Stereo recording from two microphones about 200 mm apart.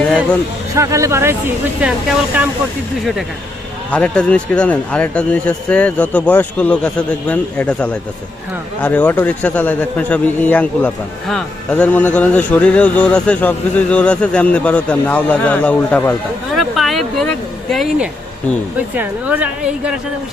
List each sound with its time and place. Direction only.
0.7 s a woman's voice: 15° right (ahead or behind)
3.9 s a man's voice: 5° left (ahead or behind)